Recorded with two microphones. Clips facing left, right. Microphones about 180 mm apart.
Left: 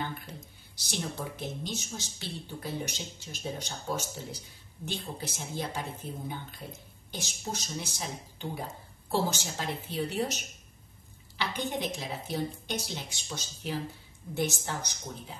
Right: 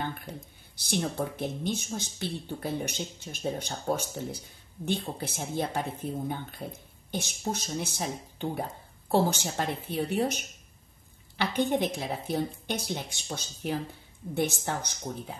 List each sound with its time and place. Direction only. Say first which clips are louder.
0.0 s speech: right 2 dB; 55° right (ahead or behind)